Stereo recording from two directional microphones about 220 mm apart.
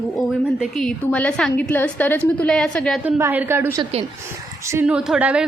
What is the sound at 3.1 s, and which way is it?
Speech, 10° right (ahead or behind).